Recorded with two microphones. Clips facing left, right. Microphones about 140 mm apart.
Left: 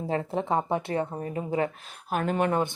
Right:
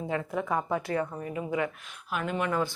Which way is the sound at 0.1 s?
30° left (ahead or behind).